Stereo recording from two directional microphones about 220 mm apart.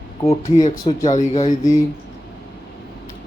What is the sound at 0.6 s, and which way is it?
Speech, 30° left (ahead or behind).